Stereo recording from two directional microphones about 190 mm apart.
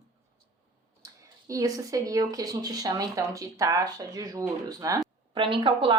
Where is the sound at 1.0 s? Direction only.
15° right (ahead or behind).